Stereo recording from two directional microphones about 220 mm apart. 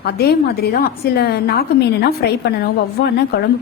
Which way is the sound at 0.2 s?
45° left (ahead or behind).